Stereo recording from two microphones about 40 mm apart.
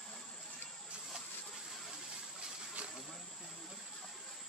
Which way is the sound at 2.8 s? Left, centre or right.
Right.